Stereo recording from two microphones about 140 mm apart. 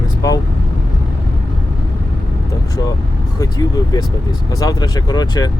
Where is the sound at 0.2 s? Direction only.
25° left (ahead or behind).